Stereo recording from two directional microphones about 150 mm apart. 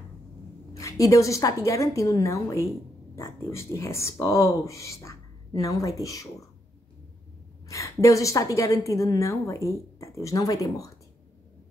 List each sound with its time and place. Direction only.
0.7 s a woman's voice: 20° left (ahead or behind)
7.6 s a woman's voice: 20° left (ahead or behind)